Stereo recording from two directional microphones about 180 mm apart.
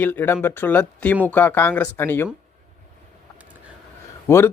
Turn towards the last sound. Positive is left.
turn(degrees=15)  # may be behind; listen again after turning